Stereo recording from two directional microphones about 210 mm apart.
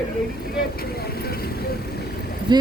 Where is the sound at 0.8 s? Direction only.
45° left (ahead or behind).